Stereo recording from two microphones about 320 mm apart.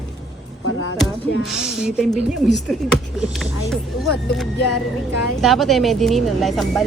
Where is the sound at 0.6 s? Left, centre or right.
Left.